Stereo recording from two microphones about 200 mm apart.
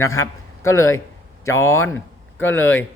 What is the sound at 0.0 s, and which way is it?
A man's voice, 15° left (ahead or behind).